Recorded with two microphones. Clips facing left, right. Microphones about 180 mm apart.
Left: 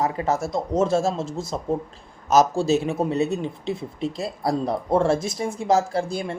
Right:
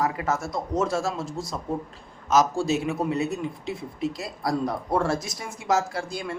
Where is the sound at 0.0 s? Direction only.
30° left (ahead or behind).